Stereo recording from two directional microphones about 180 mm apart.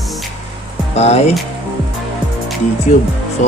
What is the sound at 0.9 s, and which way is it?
Speech, 35° left (ahead or behind).